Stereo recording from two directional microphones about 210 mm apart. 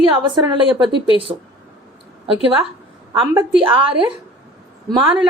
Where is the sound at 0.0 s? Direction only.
20° right (ahead or behind).